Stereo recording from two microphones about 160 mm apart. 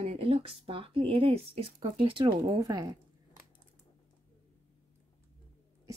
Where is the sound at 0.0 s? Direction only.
40° right (ahead or behind).